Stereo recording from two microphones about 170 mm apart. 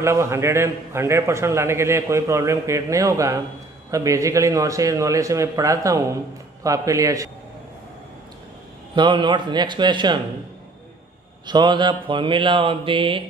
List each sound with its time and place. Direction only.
0.0 s a man's voice: 15° right (ahead or behind)
8.9 s a man's voice: 25° right (ahead or behind)
11.4 s a man's voice: 25° right (ahead or behind)